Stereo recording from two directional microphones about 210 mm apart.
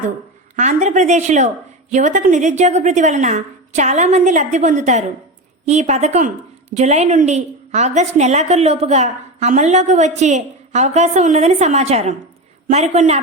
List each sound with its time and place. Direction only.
0.5 s a woman's voice: 35° right (ahead or behind)